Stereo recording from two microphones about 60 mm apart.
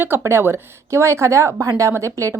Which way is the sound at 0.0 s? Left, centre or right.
Right.